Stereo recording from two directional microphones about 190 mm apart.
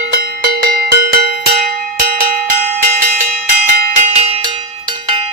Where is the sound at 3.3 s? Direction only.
55° right (ahead or behind).